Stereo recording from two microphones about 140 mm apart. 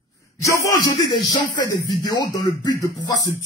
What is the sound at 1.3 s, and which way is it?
Music, 30° left (ahead or behind).